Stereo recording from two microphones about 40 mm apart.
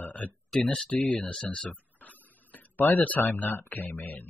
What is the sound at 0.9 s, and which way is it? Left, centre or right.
Speech, left.